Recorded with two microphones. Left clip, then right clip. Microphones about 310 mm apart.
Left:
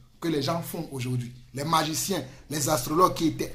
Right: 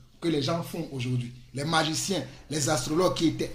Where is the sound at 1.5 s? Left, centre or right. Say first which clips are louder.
Left 1 dB; centre.